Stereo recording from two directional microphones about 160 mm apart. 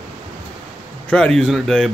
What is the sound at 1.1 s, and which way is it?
Speech, 5° left (ahead or behind).